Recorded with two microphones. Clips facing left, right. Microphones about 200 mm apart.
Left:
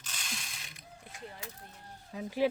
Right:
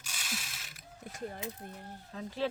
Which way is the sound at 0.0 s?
5° right (ahead or behind).